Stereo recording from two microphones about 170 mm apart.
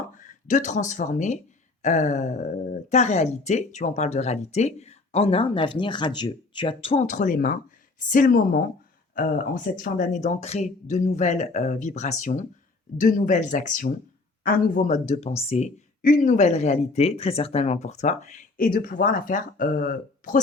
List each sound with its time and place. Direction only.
0.1 s speech: 50° left (ahead or behind)
16.0 s speech: 55° left (ahead or behind)